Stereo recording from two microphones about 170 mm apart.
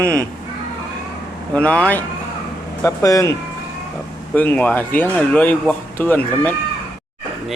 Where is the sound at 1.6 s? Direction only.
5° left (ahead or behind).